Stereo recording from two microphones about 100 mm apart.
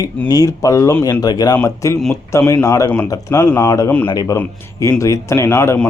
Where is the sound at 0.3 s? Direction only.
35° left (ahead or behind).